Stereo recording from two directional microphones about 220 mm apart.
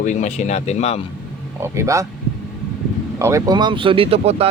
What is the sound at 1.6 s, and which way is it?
Speech, 15° right (ahead or behind).